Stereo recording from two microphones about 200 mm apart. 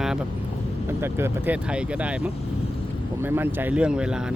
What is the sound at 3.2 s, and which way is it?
Speech, 10° right (ahead or behind).